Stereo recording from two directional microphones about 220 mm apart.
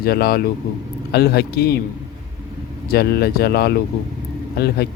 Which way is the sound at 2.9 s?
45° left (ahead or behind).